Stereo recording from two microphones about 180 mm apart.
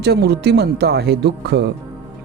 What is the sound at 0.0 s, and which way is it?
Speech, 65° right (ahead or behind).